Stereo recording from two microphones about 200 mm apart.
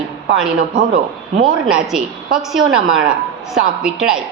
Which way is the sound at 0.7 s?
45° right (ahead or behind).